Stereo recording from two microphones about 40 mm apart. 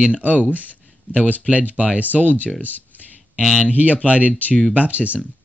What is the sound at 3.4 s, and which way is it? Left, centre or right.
Speech, centre.